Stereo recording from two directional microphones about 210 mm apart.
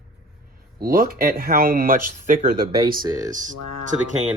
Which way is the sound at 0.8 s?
45° right (ahead or behind).